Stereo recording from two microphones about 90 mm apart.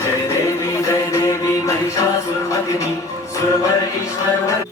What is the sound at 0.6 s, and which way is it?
Music, 35° left (ahead or behind).